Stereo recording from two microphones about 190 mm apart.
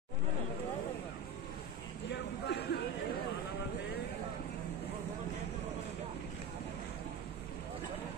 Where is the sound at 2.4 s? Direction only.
60° left (ahead or behind).